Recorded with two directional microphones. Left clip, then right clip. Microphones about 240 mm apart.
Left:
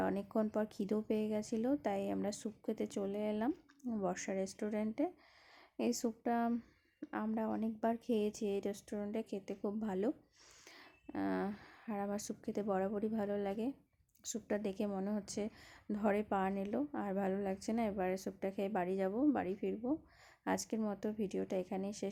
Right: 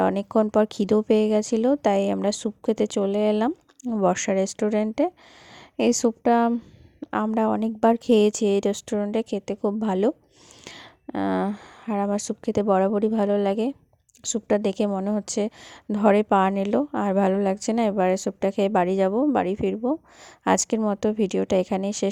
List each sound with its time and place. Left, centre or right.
0.0 s a woman's voice: right